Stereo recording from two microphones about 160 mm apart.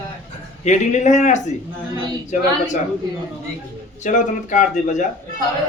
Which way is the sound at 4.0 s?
50° left (ahead or behind).